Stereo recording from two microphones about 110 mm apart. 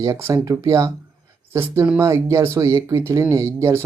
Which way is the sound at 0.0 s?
25° right (ahead or behind).